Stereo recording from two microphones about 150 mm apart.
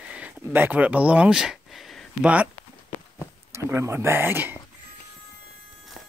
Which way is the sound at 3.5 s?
20° right (ahead or behind).